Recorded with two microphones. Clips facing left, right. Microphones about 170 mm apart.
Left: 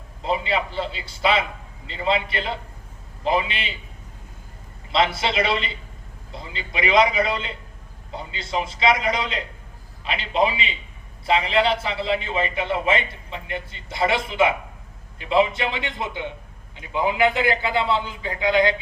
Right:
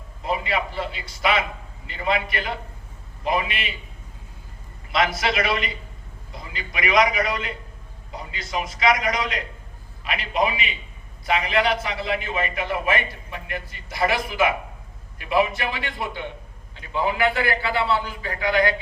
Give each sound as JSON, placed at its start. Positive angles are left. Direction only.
{"t": 0.2, "sound": "a man's voice", "side_deg": 25}
{"t": 4.9, "sound": "a man's voice", "side_deg": 25}